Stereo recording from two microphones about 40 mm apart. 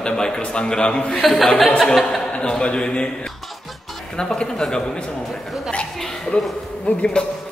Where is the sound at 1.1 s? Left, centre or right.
Centre.